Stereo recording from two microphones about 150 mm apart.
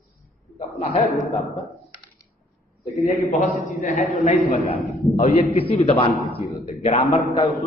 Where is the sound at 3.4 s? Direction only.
50° left (ahead or behind).